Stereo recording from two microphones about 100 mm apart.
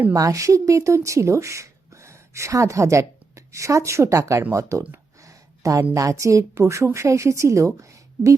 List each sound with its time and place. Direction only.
0.1 s speech: 35° right (ahead or behind)
5.2 s a sound: 35° right (ahead or behind)
5.9 s speech: 30° right (ahead or behind)